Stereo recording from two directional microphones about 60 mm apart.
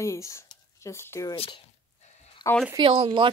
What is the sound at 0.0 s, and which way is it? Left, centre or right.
Speech, left.